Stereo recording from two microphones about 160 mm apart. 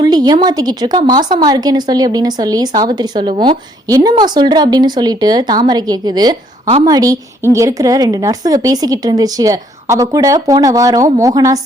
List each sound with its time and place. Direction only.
0.0 s a woman's voice: 25° right (ahead or behind)